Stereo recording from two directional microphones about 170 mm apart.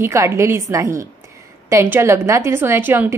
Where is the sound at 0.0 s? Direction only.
15° right (ahead or behind).